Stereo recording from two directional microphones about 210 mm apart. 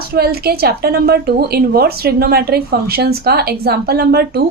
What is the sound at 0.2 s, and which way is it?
A woman's voice, 45° right (ahead or behind).